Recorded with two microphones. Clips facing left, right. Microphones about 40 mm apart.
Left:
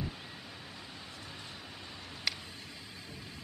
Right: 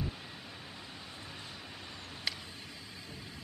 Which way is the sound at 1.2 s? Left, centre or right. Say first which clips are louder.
Even; centre.